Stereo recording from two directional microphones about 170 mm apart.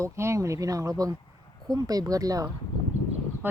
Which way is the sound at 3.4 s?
10° right (ahead or behind).